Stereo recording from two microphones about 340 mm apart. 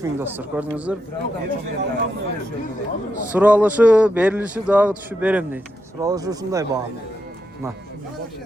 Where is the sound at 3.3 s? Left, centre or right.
Centre.